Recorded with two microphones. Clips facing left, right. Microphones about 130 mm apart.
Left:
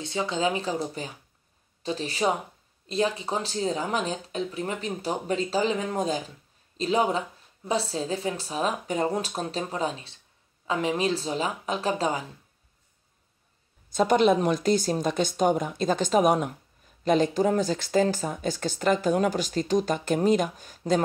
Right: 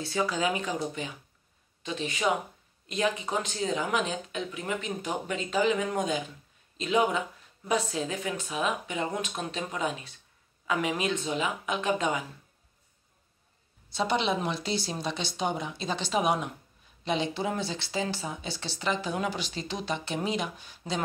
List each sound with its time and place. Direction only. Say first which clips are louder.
0.0 s speech: left 2 dB; 20° left (ahead or behind)
13.8 s speech: left 7 dB; 45° left (ahead or behind)